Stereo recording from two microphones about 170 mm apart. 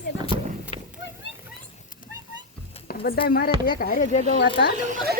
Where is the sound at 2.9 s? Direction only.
60° left (ahead or behind).